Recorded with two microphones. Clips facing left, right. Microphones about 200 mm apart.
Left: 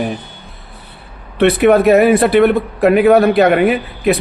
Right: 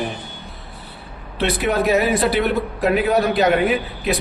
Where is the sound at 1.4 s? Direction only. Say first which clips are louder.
Left 10 dB; 60° left (ahead or behind).